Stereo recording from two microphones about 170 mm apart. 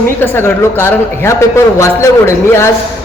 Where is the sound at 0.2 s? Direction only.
15° left (ahead or behind).